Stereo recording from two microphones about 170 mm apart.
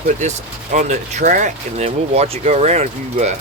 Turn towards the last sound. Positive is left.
turn(degrees=-40)  # may be behind; listen again after turning